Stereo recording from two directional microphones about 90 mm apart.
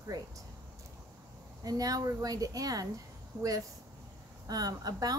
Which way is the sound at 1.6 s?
40° right (ahead or behind).